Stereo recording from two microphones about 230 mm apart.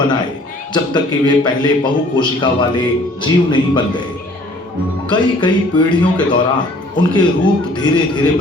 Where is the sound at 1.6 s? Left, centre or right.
Centre.